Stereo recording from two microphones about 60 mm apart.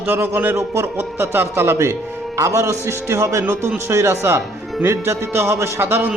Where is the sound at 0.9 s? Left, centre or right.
Right.